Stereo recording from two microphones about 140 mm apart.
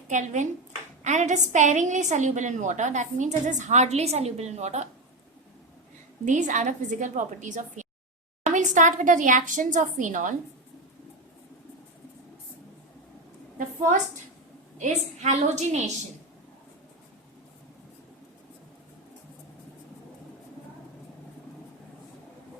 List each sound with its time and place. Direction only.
0.1 s a woman's voice: 60° right (ahead or behind)
6.2 s a woman's voice: 60° right (ahead or behind)
13.6 s a woman's voice: 65° right (ahead or behind)